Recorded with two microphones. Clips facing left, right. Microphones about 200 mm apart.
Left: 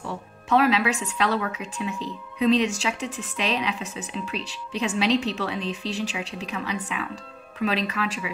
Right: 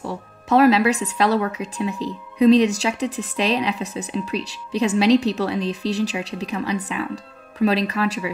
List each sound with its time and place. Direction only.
0.0 s speech: 40° right (ahead or behind)